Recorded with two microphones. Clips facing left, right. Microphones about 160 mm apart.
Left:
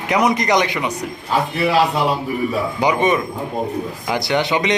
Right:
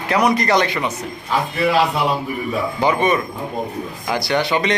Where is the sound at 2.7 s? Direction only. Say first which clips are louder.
Even; 15° left (ahead or behind).